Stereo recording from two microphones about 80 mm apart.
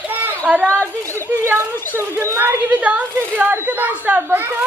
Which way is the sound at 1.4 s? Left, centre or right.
Right.